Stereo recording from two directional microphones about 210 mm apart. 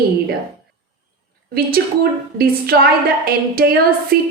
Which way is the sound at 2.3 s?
45° right (ahead or behind).